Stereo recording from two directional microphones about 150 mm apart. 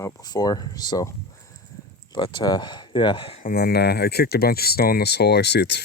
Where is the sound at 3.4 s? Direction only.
90° left.